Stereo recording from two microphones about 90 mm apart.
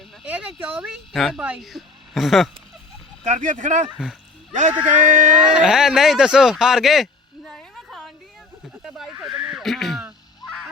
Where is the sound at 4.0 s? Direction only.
10° right (ahead or behind).